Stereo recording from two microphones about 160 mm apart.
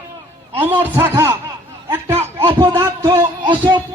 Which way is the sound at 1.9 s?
15° right (ahead or behind).